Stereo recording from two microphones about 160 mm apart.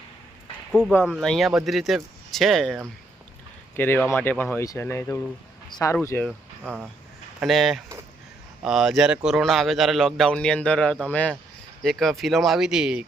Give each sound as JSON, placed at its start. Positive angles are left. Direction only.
{"t": 1.0, "sound": "a man's voice", "side_deg": 0}
{"t": 3.8, "sound": "speech", "side_deg": 10}
{"t": 6.6, "sound": "a man's voice", "side_deg": -10}